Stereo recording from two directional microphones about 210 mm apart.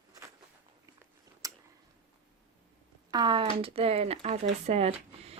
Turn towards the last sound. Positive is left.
turn(degrees=-30)  # may be behind; listen again after turning